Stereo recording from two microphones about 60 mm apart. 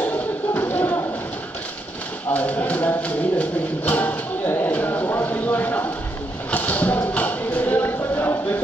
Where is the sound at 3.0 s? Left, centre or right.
Left.